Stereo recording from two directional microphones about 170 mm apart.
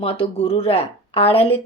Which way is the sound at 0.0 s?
35° left (ahead or behind).